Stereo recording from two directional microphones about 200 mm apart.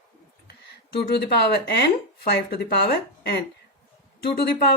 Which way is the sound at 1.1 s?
55° left (ahead or behind).